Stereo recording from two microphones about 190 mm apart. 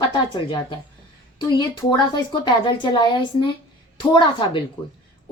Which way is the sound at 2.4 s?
25° left (ahead or behind).